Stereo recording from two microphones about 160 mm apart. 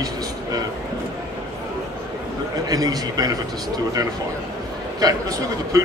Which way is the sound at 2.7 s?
25° right (ahead or behind).